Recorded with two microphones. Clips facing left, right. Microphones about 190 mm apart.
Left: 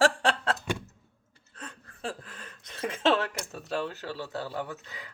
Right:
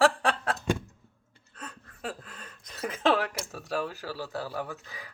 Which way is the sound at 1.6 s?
25° left (ahead or behind).